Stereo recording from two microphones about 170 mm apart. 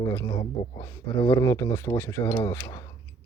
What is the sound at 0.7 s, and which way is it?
Speech, 20° left (ahead or behind).